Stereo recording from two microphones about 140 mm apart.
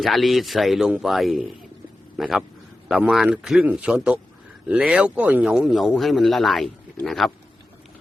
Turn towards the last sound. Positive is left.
turn(degrees=0)  # may be behind; listen again after turning